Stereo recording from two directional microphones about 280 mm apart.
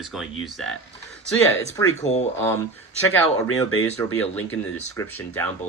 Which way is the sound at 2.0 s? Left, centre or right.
Left.